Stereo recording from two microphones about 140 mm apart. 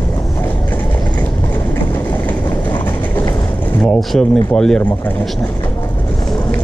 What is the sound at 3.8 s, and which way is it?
Speech, 5° left (ahead or behind).